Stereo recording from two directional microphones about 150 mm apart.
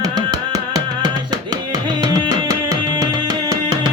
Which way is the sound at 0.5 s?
25° right (ahead or behind).